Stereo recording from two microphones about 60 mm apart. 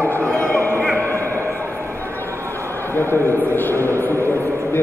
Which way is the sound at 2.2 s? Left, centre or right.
Right.